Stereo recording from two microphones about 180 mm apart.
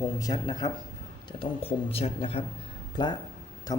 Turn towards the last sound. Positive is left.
turn(degrees=20)  # may be behind; listen again after turning